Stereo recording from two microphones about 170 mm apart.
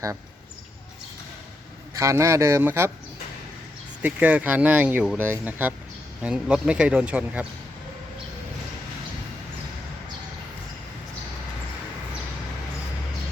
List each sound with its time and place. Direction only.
2.0 s speech: 15° right (ahead or behind)
4.0 s speech: 10° right (ahead or behind)